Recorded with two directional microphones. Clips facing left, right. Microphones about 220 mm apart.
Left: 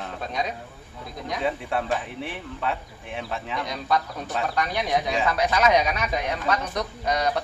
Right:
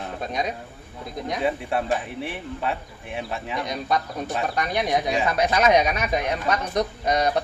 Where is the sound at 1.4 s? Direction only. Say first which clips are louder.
Right 2 dB; 5° right (ahead or behind).